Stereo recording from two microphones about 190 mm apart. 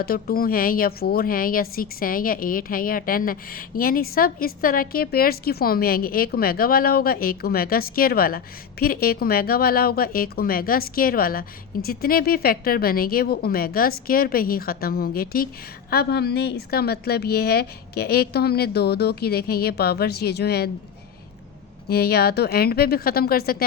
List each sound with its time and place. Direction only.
0.0 s a woman's voice: 50° left (ahead or behind)
21.8 s a woman's voice: 55° left (ahead or behind)